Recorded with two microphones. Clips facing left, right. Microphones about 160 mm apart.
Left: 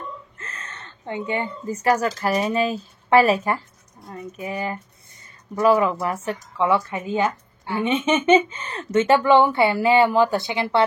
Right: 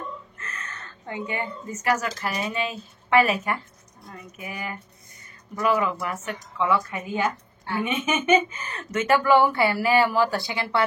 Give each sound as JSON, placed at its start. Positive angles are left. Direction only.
{"t": 0.4, "sound": "speech", "side_deg": 30}